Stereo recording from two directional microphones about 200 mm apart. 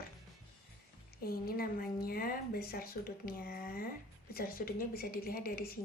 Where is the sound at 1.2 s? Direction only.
50° left (ahead or behind).